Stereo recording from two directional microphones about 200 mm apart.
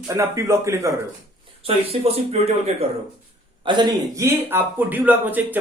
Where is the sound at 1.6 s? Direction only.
30° right (ahead or behind).